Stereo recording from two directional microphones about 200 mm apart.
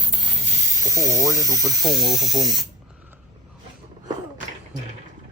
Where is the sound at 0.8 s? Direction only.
15° right (ahead or behind).